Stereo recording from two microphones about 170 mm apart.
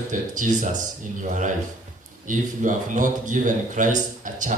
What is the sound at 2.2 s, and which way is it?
A man's voice, 50° right (ahead or behind).